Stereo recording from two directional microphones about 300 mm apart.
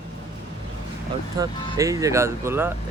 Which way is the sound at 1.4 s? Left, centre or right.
Centre.